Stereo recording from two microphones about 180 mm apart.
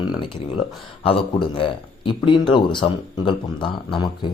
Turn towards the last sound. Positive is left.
turn(degrees=25)  # may be behind; listen again after turning